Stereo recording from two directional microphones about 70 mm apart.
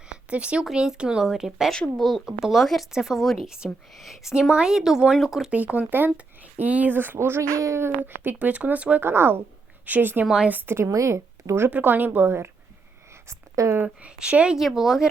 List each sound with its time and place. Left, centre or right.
0.1 s a sound: centre
0.6 s speech: centre
5.5 s a woman's voice: right
8.0 s speech: right
9.0 s a woman's voice: right
10.2 s speech: centre
10.5 s a woman's voice: right
10.8 s speech: right
11.7 s speech: right
13.2 s a sound: right
13.8 s speech: centre
14.5 s speech: centre